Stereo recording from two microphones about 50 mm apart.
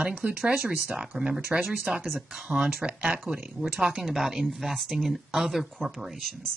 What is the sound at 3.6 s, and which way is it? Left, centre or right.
Speech, centre.